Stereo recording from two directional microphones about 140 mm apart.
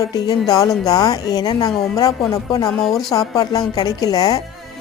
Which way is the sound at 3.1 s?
25° left (ahead or behind).